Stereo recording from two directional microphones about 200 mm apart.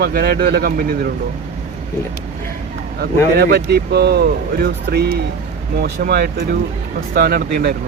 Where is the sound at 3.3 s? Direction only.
50° right (ahead or behind).